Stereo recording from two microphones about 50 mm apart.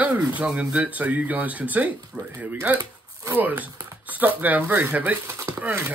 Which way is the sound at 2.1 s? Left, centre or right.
Centre.